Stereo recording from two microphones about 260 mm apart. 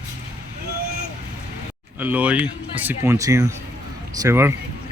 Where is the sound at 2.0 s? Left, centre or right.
Centre.